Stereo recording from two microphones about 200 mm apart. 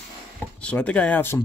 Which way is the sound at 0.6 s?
5° left (ahead or behind).